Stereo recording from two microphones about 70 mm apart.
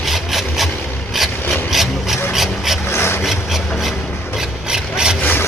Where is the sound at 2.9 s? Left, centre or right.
Left.